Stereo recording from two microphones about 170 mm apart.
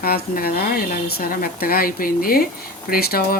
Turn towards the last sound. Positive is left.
turn(degrees=60)  # may be behind; listen again after turning